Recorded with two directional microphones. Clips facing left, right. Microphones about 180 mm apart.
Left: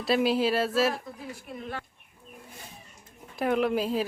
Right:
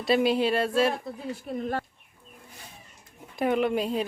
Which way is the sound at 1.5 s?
45° right (ahead or behind).